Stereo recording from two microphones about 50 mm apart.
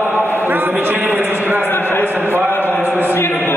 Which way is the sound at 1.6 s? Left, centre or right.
Left.